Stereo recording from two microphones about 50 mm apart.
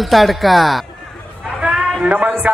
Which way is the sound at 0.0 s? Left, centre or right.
Centre.